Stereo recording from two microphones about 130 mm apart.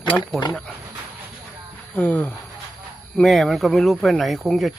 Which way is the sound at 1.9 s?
10° left (ahead or behind).